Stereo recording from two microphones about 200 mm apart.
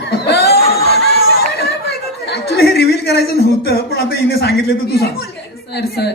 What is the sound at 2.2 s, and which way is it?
A man's voice, 50° left (ahead or behind).